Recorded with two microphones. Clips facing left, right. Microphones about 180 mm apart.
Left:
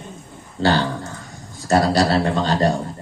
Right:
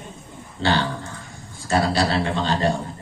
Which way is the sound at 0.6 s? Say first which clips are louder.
Left 3 dB; 40° left (ahead or behind).